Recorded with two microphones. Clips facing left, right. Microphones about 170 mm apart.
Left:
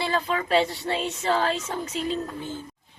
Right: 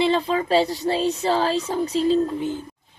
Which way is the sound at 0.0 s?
25° right (ahead or behind).